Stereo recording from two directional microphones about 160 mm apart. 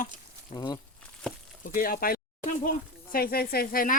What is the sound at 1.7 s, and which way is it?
Speech, 65° left (ahead or behind).